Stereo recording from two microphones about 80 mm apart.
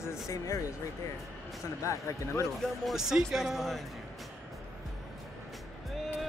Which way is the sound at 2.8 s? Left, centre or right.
Centre.